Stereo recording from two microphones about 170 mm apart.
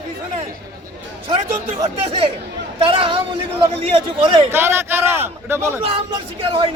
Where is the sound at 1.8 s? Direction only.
35° right (ahead or behind).